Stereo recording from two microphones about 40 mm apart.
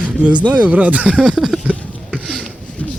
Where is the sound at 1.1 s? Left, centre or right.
Centre.